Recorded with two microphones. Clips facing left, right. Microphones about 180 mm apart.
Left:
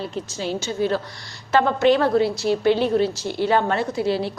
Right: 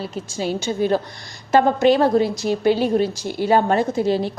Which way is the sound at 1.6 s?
40° right (ahead or behind).